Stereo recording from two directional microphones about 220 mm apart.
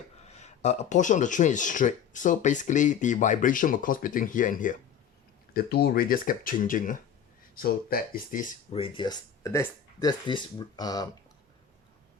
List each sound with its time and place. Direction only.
0.3 s speech: 30° left (ahead or behind)
8.8 s speech: 20° left (ahead or behind)